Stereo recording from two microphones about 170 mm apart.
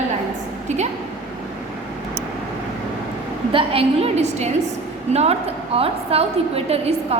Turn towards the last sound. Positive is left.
turn(degrees=-35)  # may be behind; listen again after turning